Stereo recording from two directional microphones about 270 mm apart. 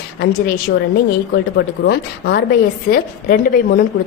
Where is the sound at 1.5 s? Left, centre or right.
Left.